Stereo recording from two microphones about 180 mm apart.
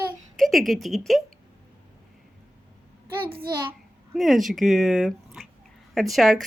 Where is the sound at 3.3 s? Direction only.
30° right (ahead or behind).